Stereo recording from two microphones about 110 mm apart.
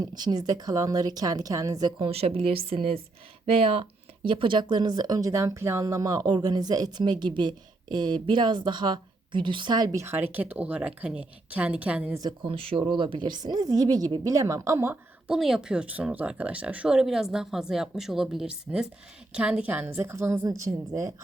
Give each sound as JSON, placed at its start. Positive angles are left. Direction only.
{"t": 0.0, "sound": "speech", "side_deg": -40}
{"t": 2.0, "sound": "speech", "side_deg": -65}
{"t": 4.7, "sound": "speech", "side_deg": -40}
{"t": 10.0, "sound": "a woman's voice", "side_deg": -20}
{"t": 12.5, "sound": "speech", "side_deg": -60}
{"t": 15.3, "sound": "a woman's voice", "side_deg": -5}